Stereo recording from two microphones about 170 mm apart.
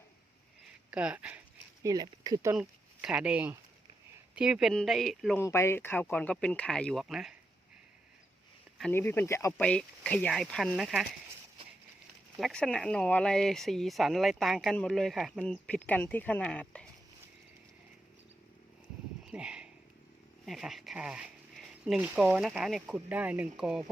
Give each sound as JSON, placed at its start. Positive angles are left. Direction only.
{"t": 0.9, "sound": "speech", "side_deg": -5}
{"t": 1.8, "sound": "speech", "side_deg": -20}
{"t": 2.6, "sound": "speech", "side_deg": -5}
{"t": 5.4, "sound": "speech", "side_deg": 15}
{"t": 8.9, "sound": "speech", "side_deg": 15}
{"t": 12.4, "sound": "speech", "side_deg": 5}
{"t": 19.2, "sound": "a sound", "side_deg": -5}
{"t": 20.4, "sound": "speech", "side_deg": 0}